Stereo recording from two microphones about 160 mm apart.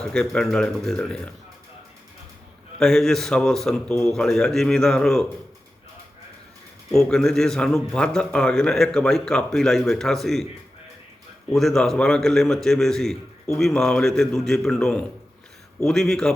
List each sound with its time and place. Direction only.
0.0 s speech: 5° left (ahead or behind)
2.7 s speech: 5° left (ahead or behind)
6.9 s speech: 5° left (ahead or behind)
11.5 s speech: 5° left (ahead or behind)